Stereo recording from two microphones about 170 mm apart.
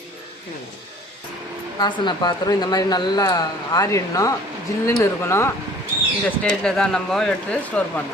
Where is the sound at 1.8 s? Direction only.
25° left (ahead or behind).